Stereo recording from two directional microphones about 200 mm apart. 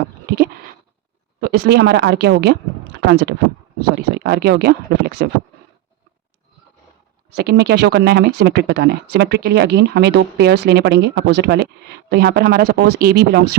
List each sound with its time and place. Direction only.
1.4 s speech: 50° right (ahead or behind)
7.3 s speech: 55° right (ahead or behind)